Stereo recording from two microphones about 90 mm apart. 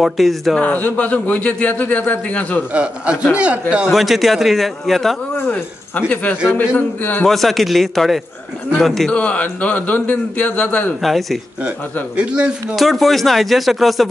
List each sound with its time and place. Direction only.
0.0 s speech: centre (ahead or behind)
0.6 s a man's voice: 15° left (ahead or behind)
2.7 s a man's voice: 10° right (ahead or behind)
5.5 s speech: 20° left (ahead or behind)
7.2 s speech: centre (ahead or behind)
9.1 s a man's voice: 15° left (ahead or behind)
11.0 s speech: centre (ahead or behind)
12.2 s a man's voice: 10° right (ahead or behind)
12.7 s speech: centre (ahead or behind)